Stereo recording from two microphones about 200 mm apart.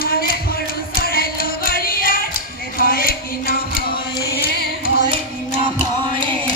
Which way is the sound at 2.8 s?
45° left (ahead or behind).